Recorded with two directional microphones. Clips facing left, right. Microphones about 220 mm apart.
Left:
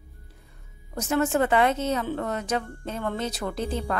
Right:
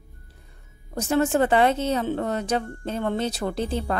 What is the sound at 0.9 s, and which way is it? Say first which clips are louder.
Speech: right 2 dB; 30° right (ahead or behind).